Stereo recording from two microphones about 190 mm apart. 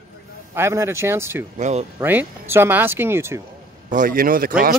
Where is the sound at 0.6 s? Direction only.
15° right (ahead or behind).